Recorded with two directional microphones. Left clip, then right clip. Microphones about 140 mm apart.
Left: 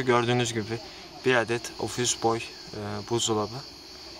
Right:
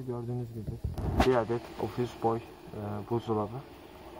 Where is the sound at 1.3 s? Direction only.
50° left (ahead or behind).